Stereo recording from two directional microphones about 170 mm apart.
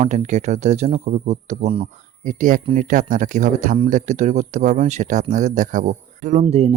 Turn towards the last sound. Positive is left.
turn(degrees=-35)  # may be behind; listen again after turning